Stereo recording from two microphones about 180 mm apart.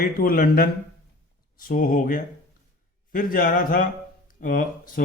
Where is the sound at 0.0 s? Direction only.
55° left (ahead or behind).